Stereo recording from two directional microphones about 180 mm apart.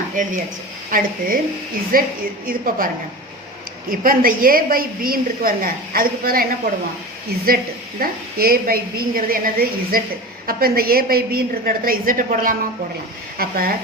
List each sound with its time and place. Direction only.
0.9 s a woman's voice: 50° right (ahead or behind)